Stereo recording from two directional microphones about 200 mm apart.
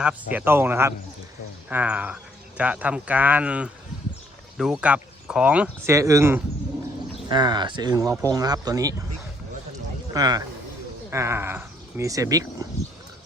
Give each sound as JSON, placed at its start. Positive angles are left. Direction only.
{"t": 0.0, "sound": "speech", "side_deg": -5}
{"t": 10.2, "sound": "speech", "side_deg": -20}